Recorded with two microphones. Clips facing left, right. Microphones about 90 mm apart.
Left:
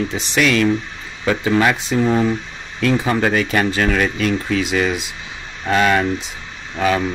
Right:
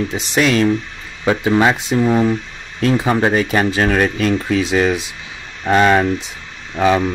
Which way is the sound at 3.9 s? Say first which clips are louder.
Right 2 dB; 40° right (ahead or behind).